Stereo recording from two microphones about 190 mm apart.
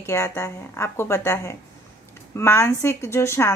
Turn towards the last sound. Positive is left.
turn(degrees=15)  # may be behind; listen again after turning